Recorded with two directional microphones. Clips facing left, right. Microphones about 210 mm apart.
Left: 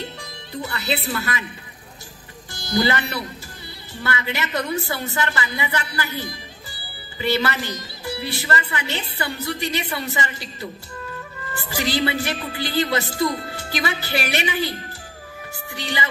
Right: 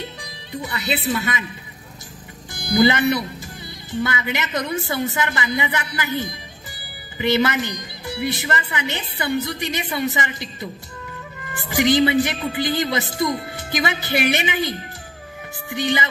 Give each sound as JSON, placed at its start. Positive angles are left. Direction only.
{"t": 0.2, "sound": "music", "side_deg": -15}
{"t": 1.1, "sound": "a woman's voice", "side_deg": -20}
{"t": 2.5, "sound": "a woman's voice", "side_deg": -20}
{"t": 15.7, "sound": "a woman's voice", "side_deg": -20}